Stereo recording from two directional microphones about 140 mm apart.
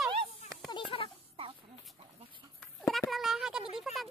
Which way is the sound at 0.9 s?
40° left (ahead or behind).